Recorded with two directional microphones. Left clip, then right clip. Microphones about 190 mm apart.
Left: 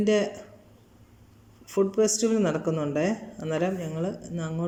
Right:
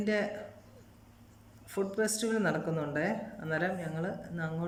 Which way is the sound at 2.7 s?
10° left (ahead or behind).